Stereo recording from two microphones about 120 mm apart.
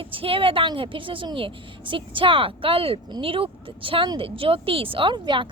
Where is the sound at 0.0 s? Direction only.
50° right (ahead or behind).